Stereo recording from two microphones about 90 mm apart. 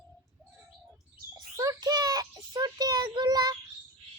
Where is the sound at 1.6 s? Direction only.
45° right (ahead or behind).